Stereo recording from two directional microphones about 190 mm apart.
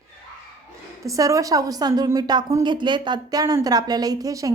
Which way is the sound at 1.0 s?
15° right (ahead or behind).